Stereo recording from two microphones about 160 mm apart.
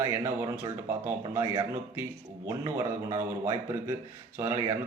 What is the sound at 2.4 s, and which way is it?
A man's voice, 20° right (ahead or behind).